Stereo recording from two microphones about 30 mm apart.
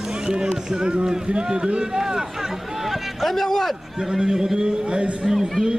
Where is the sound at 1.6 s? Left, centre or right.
Right.